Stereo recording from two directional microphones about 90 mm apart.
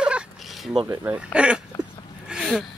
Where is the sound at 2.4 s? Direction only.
Centre (ahead or behind).